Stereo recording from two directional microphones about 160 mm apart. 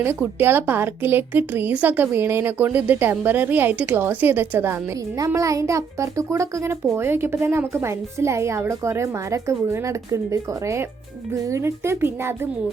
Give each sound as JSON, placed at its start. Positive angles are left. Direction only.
{"t": 0.0, "sound": "a woman's voice", "side_deg": -15}